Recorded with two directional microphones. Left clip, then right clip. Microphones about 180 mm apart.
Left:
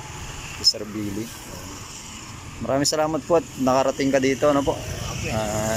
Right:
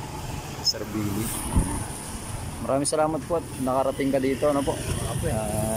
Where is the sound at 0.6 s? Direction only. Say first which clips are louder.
Left 6 dB; 70° left (ahead or behind).